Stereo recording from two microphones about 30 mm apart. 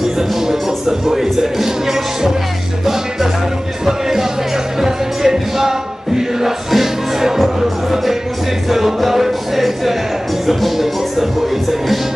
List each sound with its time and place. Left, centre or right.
0.5 s speech: centre
2.8 s music: centre